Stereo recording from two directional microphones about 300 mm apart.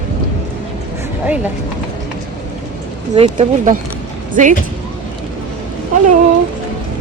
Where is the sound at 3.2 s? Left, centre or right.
Right.